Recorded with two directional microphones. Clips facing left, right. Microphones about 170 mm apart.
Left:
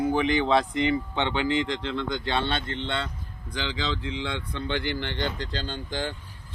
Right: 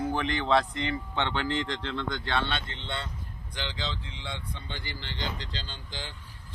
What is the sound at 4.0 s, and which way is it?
Speech, 90° left.